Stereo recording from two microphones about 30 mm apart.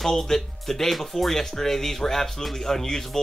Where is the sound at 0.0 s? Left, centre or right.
Centre.